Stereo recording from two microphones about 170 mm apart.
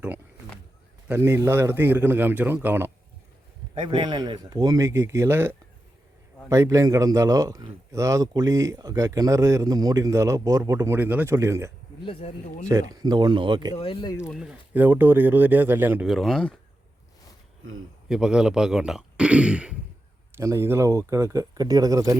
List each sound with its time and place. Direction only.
1.0 s a man's voice: 15° right (ahead or behind)
3.8 s a man's voice: 25° right (ahead or behind)
12.0 s speech: 35° left (ahead or behind)
12.9 s a man's voice: 20° right (ahead or behind)
13.7 s speech: 30° left (ahead or behind)
14.3 s a man's voice: 5° right (ahead or behind)
16.0 s speech: centre (ahead or behind)
18.1 s a man's voice: 5° right (ahead or behind); by 22.1 s 20° right (ahead or behind)